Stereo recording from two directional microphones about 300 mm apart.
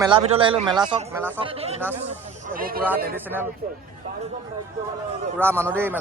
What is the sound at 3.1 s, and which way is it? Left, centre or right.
Speech, centre.